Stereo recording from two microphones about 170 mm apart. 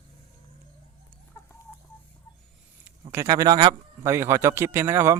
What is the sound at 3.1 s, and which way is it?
A man's voice, 15° right (ahead or behind).